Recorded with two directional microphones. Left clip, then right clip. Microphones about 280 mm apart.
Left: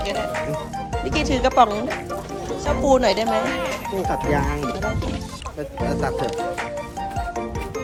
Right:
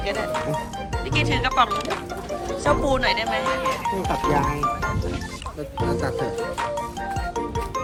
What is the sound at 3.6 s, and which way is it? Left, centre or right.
Speech, centre.